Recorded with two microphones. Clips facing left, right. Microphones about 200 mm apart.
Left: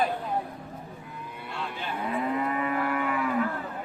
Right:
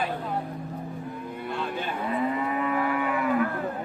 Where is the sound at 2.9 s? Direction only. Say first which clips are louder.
Right 1 dB; centre (ahead or behind).